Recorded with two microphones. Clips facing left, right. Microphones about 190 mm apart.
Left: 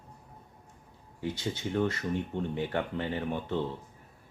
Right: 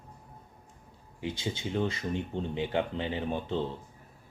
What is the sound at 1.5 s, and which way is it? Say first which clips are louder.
Speech: left 3 dB; 15° right (ahead or behind).